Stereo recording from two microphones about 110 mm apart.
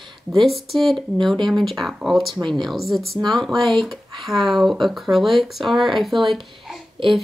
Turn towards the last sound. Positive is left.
turn(degrees=-50)  # may be behind; listen again after turning